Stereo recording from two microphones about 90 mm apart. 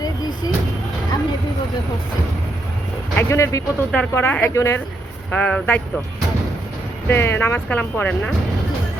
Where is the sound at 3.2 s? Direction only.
35° left (ahead or behind).